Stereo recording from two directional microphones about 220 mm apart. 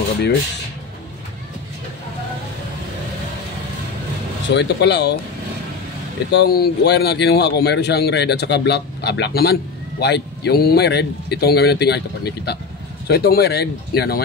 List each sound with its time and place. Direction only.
4.5 s a man's voice: 50° left (ahead or behind)
6.3 s a man's voice: 45° left (ahead or behind)